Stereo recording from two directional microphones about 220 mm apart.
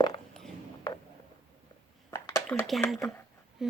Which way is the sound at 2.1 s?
10° left (ahead or behind).